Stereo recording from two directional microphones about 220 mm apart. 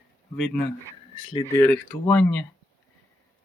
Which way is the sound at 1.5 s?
10° left (ahead or behind).